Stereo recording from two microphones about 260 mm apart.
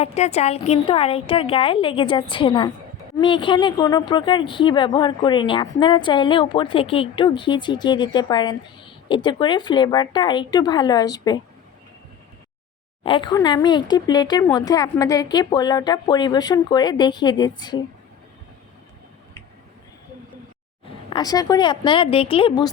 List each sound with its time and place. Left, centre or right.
0.0 s a woman's voice: left
13.0 s a woman's voice: centre
21.1 s a woman's voice: centre